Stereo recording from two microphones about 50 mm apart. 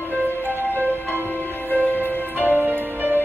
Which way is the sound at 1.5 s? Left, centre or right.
Left.